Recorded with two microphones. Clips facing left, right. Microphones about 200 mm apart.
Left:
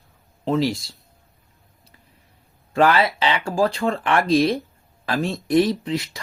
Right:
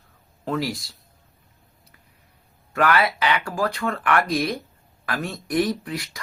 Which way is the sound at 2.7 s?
25° left (ahead or behind).